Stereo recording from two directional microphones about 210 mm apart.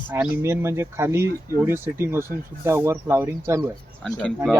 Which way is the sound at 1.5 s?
10° right (ahead or behind).